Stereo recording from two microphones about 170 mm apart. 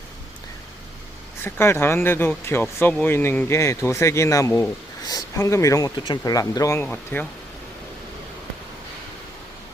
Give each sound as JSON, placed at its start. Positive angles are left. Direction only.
{"t": 1.5, "sound": "speech", "side_deg": 15}